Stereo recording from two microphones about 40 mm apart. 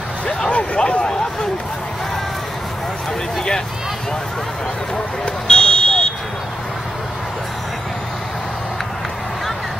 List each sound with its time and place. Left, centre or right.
0.5 s speech: left
5.5 s vehicle: centre